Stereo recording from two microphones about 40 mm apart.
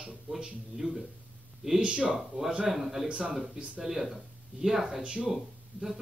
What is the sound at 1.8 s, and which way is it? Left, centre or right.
Speech, right.